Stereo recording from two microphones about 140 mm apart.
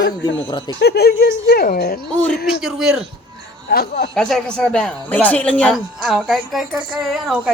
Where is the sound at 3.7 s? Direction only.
90° left.